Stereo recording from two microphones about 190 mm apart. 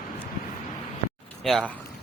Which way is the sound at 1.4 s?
Centre (ahead or behind).